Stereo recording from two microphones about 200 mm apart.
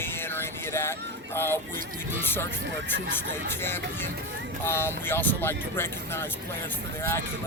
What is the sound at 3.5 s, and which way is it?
Speech, 10° left (ahead or behind).